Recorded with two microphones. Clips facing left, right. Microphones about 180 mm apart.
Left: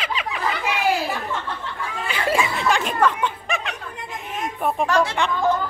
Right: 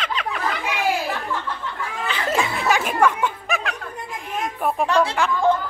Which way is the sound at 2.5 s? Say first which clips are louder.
Right 1 dB; 10° right (ahead or behind).